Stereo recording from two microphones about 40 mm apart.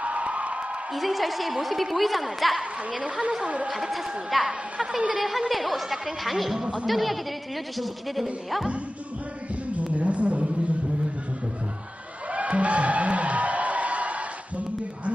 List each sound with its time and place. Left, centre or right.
0.0 s music: right
0.9 s speech: centre
3.0 s a woman's voice: right
3.7 s speech: centre
9.7 s music: right
12.3 s music: right